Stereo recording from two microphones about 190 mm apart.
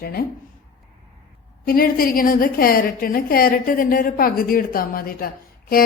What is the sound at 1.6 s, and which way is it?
A woman's voice, 50° left (ahead or behind).